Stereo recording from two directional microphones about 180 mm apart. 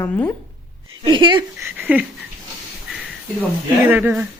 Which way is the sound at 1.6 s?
10° right (ahead or behind).